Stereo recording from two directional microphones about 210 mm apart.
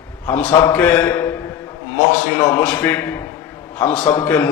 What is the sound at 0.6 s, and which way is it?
Speech, 5° left (ahead or behind).